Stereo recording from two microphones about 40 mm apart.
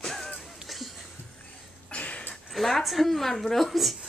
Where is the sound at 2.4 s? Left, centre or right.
Centre.